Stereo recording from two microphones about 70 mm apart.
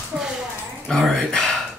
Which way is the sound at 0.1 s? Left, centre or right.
Centre.